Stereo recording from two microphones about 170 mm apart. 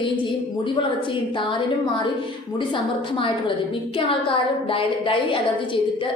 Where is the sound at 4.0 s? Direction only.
30° left (ahead or behind).